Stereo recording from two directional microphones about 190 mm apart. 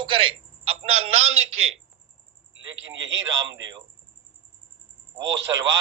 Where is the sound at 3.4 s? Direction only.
80° right.